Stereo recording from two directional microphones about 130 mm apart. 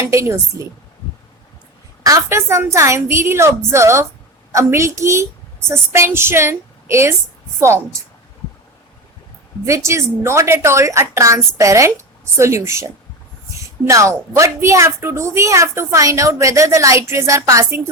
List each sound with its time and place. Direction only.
0.0 s a woman's voice: 20° right (ahead or behind)
2.0 s a woman's voice: 25° right (ahead or behind)
9.6 s a woman's voice: 20° right (ahead or behind)